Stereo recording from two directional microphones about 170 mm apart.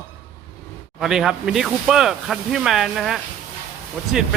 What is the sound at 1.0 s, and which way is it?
Speech, centre (ahead or behind).